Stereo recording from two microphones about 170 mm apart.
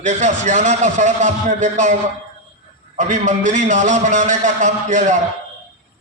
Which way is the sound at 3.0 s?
45° right (ahead or behind).